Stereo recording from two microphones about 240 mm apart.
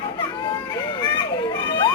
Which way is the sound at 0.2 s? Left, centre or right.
Centre.